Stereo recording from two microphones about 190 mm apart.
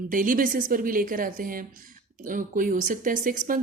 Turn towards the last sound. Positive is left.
turn(degrees=-45)  # may be behind; listen again after turning